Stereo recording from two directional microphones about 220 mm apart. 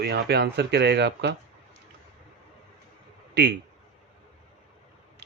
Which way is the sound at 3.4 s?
50° right (ahead or behind).